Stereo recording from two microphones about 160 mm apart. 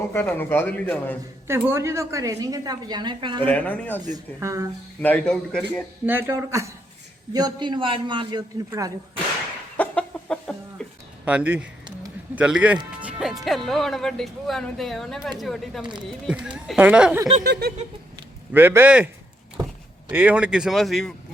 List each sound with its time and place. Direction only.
0.1 s speech: 15° left (ahead or behind)
1.5 s a woman's voice: 15° right (ahead or behind)
3.4 s speech: 10° left (ahead or behind)
4.4 s a woman's voice: 20° right (ahead or behind)
4.9 s speech: 10° left (ahead or behind)
6.1 s a woman's voice: 15° right (ahead or behind); by 8.4 s 30° right (ahead or behind)
9.7 s chicken: 10° left (ahead or behind)
11.3 s speech: 10° right (ahead or behind)
17.4 s snicker: 85° right
18.5 s speech: 15° right (ahead or behind)
20.1 s speech: 10° right (ahead or behind)